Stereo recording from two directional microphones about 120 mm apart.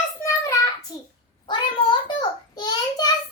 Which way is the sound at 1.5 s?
40° left (ahead or behind).